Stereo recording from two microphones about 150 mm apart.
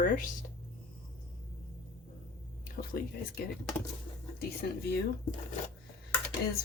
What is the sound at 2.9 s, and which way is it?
Speech, 80° left.